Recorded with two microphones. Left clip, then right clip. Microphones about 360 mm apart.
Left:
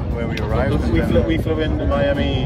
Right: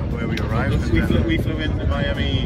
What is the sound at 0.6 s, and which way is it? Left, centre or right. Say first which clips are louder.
Speech: left 4 dB; left.